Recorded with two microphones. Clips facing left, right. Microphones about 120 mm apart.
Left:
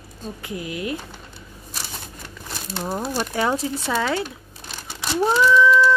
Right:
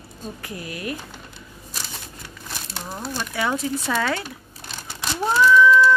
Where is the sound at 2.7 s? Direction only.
30° left (ahead or behind).